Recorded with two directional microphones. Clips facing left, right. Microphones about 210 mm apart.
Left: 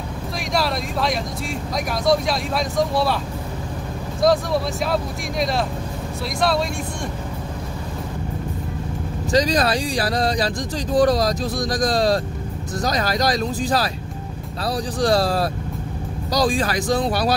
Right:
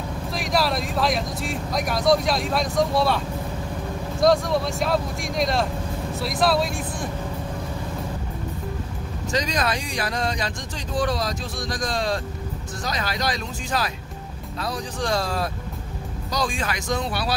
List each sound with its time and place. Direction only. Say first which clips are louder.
0.5 s speech: even; centre (ahead or behind)
4.2 s speech: left 1 dB; centre (ahead or behind)
9.3 s speech: left 6 dB; 35° left (ahead or behind)